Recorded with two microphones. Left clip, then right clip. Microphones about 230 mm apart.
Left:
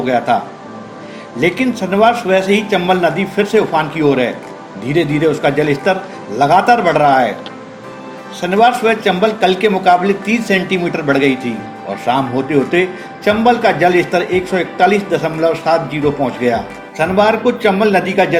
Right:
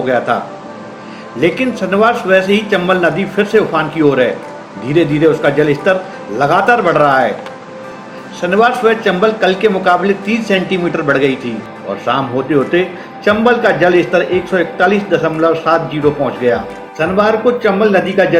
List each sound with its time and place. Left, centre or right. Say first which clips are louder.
0.0 s a man's voice: even; left
1.4 s a man's voice: right 1 dB; left
8.4 s a man's voice: even; left
17.0 s a man's voice: even; left